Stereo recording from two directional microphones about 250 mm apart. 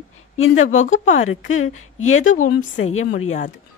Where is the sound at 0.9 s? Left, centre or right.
Left.